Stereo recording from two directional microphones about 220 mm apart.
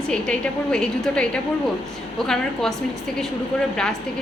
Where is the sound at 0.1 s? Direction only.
5° left (ahead or behind).